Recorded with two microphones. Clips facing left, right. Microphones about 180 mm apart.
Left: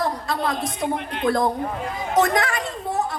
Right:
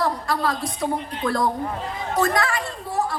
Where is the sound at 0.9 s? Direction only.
65° left (ahead or behind).